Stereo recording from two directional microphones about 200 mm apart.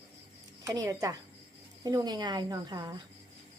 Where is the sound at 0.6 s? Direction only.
15° right (ahead or behind).